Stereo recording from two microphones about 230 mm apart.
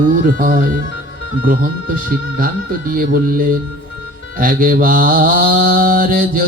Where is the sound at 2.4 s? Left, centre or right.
Right.